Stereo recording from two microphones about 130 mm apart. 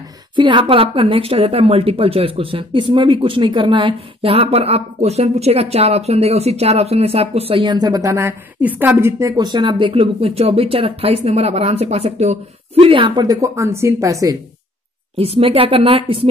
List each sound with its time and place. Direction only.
0.4 s a woman's voice: 40° right (ahead or behind); by 9.3 s 15° right (ahead or behind)
9.4 s a woman's voice: 35° right (ahead or behind); by 12.4 s 55° right (ahead or behind)
12.7 s a woman's voice: 40° right (ahead or behind); by 14.4 s 25° right (ahead or behind)
15.1 s a woman's voice: 45° right (ahead or behind)